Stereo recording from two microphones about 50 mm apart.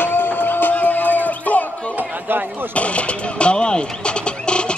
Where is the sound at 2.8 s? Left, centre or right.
Left.